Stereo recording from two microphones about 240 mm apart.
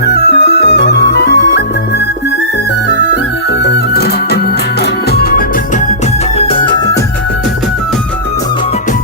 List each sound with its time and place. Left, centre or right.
0.0 s music: left
3.6 s music: left
6.4 s music: left